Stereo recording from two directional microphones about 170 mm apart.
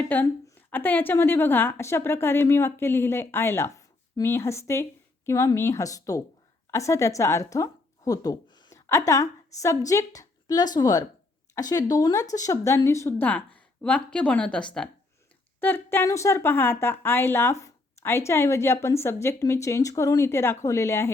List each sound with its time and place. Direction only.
0.0 s a woman's voice: 10° left (ahead or behind)